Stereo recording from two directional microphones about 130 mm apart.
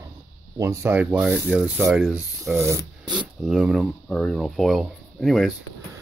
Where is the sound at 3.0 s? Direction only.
35° right (ahead or behind).